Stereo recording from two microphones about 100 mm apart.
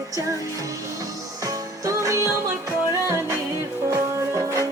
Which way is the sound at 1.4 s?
35° right (ahead or behind).